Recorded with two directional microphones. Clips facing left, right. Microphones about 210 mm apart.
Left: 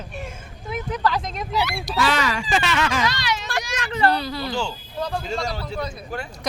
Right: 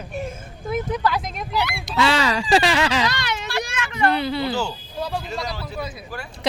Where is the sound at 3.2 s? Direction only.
55° right (ahead or behind).